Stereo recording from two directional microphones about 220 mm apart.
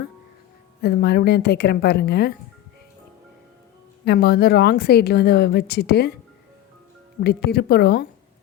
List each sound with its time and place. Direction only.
0.8 s a woman's voice: 45° left (ahead or behind)
4.0 s a woman's voice: 45° left (ahead or behind)
7.3 s a woman's voice: 45° left (ahead or behind)